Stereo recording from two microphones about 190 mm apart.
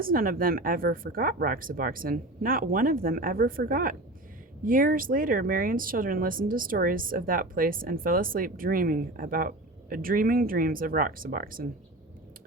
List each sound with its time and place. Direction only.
0.0 s speech: 50° right (ahead or behind)